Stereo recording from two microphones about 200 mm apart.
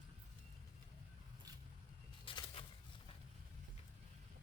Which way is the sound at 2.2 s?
25° left (ahead or behind).